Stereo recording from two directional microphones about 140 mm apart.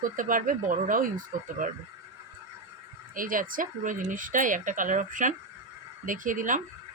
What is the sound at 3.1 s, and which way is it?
Speech, 80° right.